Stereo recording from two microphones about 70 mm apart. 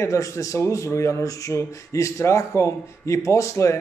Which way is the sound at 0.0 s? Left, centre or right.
Left.